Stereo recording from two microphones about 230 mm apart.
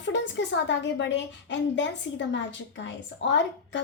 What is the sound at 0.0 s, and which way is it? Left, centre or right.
A woman's voice, left.